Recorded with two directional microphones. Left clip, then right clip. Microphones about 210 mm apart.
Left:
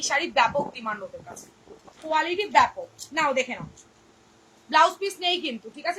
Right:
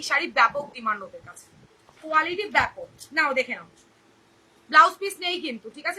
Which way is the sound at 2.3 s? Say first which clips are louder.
Left 3 dB; 10° right (ahead or behind).